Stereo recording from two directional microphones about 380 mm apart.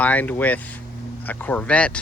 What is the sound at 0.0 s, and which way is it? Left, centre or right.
Speech, centre.